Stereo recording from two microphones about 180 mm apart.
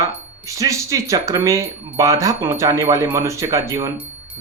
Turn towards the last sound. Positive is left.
turn(degrees=-15)  # may be behind; listen again after turning